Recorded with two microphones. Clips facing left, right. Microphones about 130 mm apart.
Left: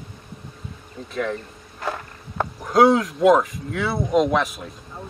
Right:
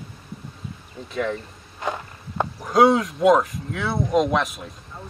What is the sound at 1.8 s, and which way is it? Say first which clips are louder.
Walk: right 1 dB; 15° right (ahead or behind).